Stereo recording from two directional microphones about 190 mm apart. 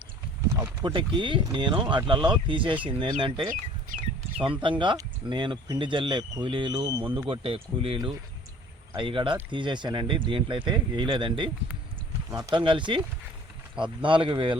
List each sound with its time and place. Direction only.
0.5 s speech: 20° right (ahead or behind)